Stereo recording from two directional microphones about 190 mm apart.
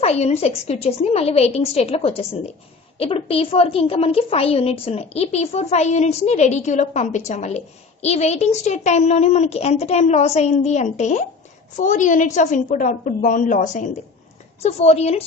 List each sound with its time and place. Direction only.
0.0 s a woman's voice: 35° left (ahead or behind)